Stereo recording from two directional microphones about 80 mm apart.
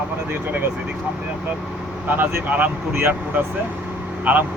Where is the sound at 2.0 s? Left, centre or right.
Right.